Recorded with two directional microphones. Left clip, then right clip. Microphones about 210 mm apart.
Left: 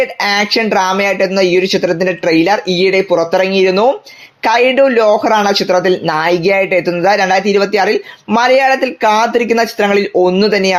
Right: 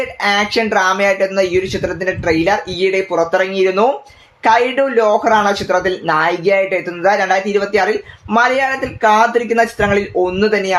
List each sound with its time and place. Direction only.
0.2 s speech: 30° left (ahead or behind)